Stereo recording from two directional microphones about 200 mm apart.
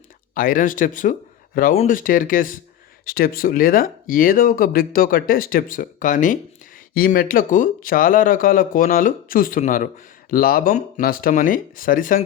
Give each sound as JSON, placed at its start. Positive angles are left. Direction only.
{"t": 0.3, "sound": "speech", "side_deg": 45}